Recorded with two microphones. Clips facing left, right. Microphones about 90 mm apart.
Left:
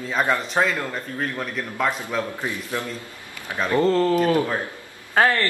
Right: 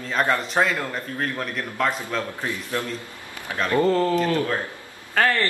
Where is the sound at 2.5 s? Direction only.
15° left (ahead or behind).